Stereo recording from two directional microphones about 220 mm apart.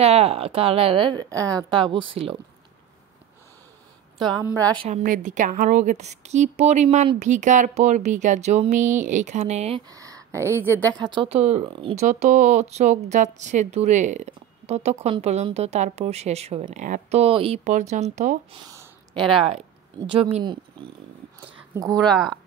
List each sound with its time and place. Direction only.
0.0 s speech: 30° right (ahead or behind)
4.7 s a woman's voice: 30° right (ahead or behind); by 10.5 s 15° right (ahead or behind)
10.7 s a woman's voice: 10° left (ahead or behind)
11.0 s speech: 20° right (ahead or behind)
18.6 s a sound: 15° right (ahead or behind)
20.1 s speech: 25° right (ahead or behind)
21.5 s a sound: 15° right (ahead or behind)
22.1 s a woman's voice: centre (ahead or behind)